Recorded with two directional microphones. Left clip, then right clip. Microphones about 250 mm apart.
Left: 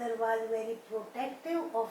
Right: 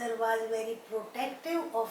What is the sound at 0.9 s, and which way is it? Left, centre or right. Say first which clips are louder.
Speech: right 2 dB; left.